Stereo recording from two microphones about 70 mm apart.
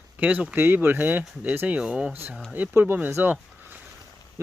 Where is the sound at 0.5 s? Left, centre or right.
Right; by 2.2 s centre.